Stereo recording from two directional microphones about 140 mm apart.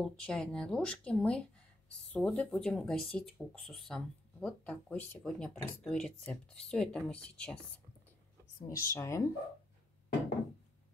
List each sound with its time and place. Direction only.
0.0 s speech: 5° left (ahead or behind)
8.5 s speech: 20° left (ahead or behind)